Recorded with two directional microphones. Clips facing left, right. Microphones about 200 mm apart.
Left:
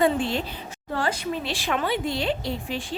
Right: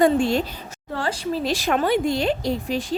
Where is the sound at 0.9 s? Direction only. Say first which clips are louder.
Right 2 dB; 30° right (ahead or behind).